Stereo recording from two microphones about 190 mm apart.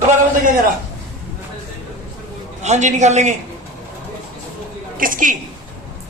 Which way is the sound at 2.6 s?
35° right (ahead or behind).